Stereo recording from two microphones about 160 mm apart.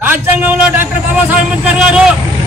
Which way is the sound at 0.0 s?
10° right (ahead or behind).